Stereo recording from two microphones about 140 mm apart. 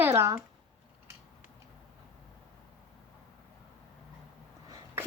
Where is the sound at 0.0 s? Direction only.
20° right (ahead or behind).